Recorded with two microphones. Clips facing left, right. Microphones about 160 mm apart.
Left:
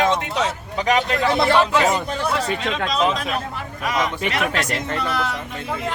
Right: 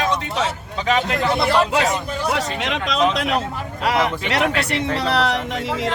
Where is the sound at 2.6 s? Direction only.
80° right.